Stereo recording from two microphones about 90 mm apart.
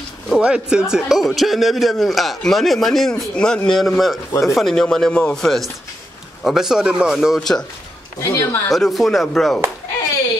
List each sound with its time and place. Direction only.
0.3 s speech: 10° right (ahead or behind)
7.3 s speech: 5° left (ahead or behind)
8.2 s speech: 35° left (ahead or behind)
8.6 s speech: 5° left (ahead or behind)